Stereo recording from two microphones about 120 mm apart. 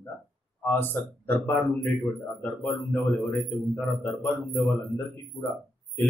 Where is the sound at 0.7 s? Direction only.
15° left (ahead or behind).